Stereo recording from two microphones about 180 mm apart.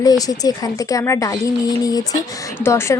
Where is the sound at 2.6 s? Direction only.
15° left (ahead or behind).